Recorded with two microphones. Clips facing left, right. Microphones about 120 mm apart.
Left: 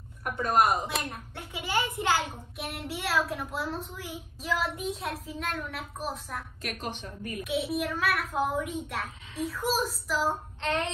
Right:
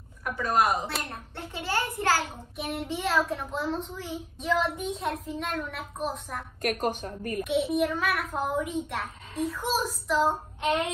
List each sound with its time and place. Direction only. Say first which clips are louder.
0.2 s a woman's voice: even; 50° left (ahead or behind)
1.1 s a child's voice: right 2 dB; 10° left (ahead or behind)
2.5 s a child's voice: right 7 dB; centre (ahead or behind)
6.6 s a woman's voice: right 12 dB; 45° right (ahead or behind)
7.4 s a child's voice: right 4 dB; centre (ahead or behind)
10.6 s child singing: right 4 dB; 10° right (ahead or behind)